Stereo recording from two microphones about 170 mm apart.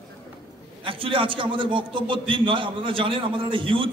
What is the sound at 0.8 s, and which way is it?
A man's voice, 30° right (ahead or behind).